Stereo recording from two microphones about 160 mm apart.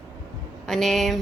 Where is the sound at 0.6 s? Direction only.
Centre (ahead or behind).